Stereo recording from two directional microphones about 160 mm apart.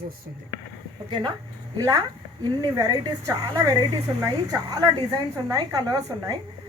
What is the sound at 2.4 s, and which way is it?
Speech, 25° right (ahead or behind).